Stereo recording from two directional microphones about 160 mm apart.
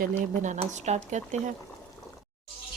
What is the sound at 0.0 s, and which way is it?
Speech, 50° right (ahead or behind).